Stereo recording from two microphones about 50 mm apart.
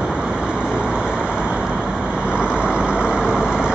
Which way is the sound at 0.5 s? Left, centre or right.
Right.